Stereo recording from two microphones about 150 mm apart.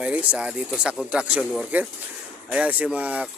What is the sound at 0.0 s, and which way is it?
Speech, 10° right (ahead or behind).